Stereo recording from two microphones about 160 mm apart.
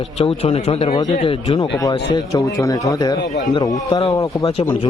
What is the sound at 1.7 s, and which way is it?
Speech, 20° left (ahead or behind).